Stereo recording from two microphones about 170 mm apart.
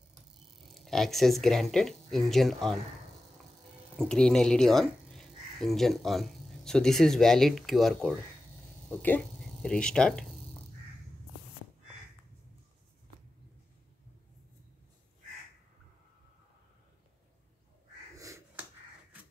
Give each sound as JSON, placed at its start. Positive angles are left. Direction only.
{"t": 0.7, "sound": "speech", "side_deg": 0}
{"t": 4.0, "sound": "speech", "side_deg": 5}
{"t": 18.1, "sound": "finger snapping", "side_deg": -20}